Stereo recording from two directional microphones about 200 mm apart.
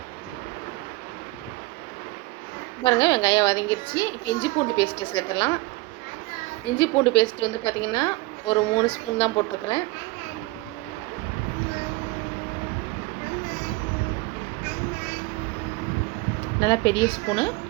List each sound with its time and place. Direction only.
2.8 s a woman's voice: 20° left (ahead or behind)
6.7 s a woman's voice: 20° left (ahead or behind)
16.6 s a woman's voice: 20° left (ahead or behind)